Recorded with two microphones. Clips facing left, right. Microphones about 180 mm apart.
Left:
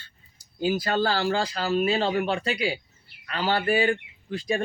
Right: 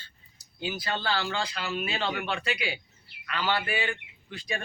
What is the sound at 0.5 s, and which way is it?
Speech, 45° left (ahead or behind).